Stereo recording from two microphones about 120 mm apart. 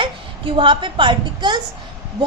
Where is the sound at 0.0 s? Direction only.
45° right (ahead or behind).